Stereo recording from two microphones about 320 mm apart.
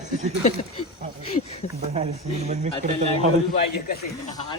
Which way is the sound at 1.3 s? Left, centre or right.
Centre.